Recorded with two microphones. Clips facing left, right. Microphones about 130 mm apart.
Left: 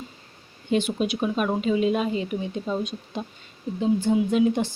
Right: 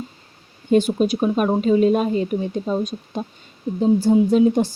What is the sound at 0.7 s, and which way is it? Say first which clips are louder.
A woman's voice: right 7 dB; 40° right (ahead or behind).